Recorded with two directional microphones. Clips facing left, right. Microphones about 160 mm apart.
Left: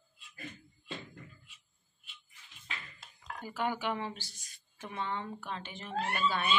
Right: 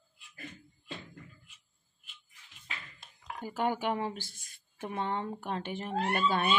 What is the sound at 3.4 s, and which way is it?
A woman's voice, 45° right (ahead or behind).